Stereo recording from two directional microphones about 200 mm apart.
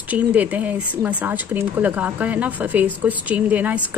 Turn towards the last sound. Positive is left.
turn(degrees=-10)  # may be behind; listen again after turning